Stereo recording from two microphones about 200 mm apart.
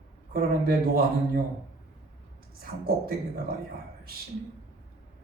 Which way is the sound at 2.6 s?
50° right (ahead or behind).